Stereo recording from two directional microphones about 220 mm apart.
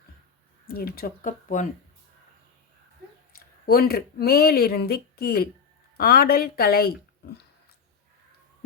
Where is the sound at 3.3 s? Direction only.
45° left (ahead or behind).